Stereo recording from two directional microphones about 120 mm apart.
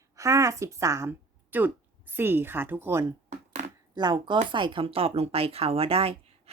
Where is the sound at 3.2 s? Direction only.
70° right (ahead or behind).